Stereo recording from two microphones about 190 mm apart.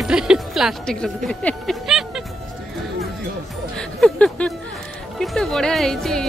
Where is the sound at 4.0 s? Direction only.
5° left (ahead or behind).